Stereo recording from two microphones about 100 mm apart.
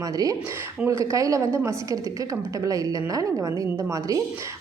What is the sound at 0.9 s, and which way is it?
Speech, 35° right (ahead or behind).